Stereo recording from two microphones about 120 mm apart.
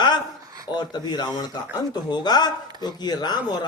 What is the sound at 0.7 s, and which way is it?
Speech, 35° left (ahead or behind).